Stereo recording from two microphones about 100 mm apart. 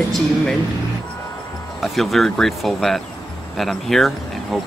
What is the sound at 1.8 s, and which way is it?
Speech, centre (ahead or behind).